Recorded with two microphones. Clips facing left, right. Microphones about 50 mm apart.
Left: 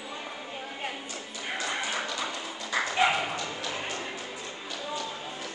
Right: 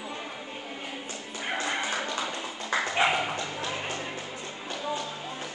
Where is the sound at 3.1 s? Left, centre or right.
Centre.